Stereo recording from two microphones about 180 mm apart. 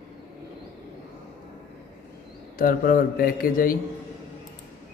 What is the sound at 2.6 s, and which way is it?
A man's voice, 55° left (ahead or behind).